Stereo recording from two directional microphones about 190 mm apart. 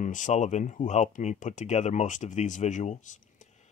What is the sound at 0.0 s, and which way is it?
Speech, 40° left (ahead or behind).